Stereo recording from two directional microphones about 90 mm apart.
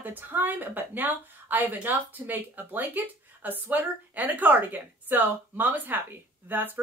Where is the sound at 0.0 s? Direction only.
20° right (ahead or behind).